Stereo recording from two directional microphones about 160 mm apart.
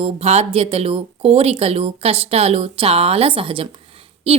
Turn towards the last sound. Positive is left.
turn(degrees=-40)  # may be behind; listen again after turning